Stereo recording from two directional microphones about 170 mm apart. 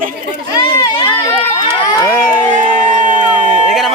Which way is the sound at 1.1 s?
15° left (ahead or behind).